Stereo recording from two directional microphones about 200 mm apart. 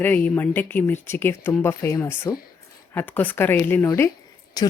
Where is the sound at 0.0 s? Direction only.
10° left (ahead or behind).